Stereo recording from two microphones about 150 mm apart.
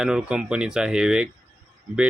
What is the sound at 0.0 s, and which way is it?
Speech, 5° right (ahead or behind).